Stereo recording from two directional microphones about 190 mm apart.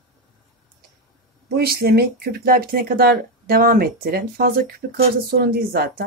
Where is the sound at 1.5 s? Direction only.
55° right (ahead or behind).